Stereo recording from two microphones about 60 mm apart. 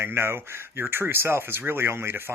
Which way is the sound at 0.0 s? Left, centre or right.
Right.